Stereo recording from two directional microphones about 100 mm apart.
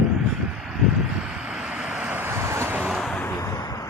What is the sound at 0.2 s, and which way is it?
Vehicle, 5° right (ahead or behind).